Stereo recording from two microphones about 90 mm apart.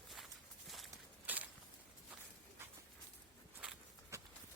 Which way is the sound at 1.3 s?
20° right (ahead or behind).